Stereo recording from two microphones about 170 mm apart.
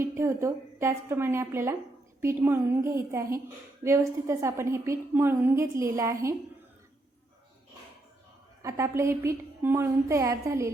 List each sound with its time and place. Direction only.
0.0 s a woman's voice: 15° right (ahead or behind)
8.6 s a woman's voice: 15° right (ahead or behind)